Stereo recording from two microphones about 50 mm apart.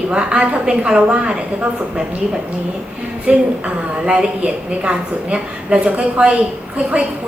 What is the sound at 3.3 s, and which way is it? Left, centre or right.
A woman's voice, right.